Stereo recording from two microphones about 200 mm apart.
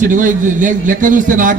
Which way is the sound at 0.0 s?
40° right (ahead or behind).